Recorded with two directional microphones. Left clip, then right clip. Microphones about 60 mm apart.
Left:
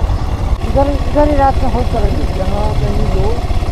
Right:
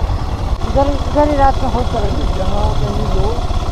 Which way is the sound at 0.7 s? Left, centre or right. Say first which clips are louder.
Left 1 dB; left.